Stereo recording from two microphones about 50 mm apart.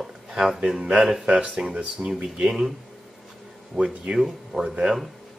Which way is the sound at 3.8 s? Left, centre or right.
Centre.